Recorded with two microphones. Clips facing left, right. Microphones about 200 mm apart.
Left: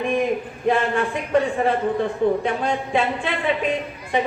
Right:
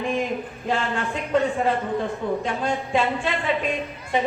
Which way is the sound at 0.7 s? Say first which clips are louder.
Left 5 dB; 55° left (ahead or behind).